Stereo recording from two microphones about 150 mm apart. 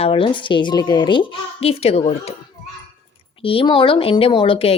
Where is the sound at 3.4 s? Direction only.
40° left (ahead or behind).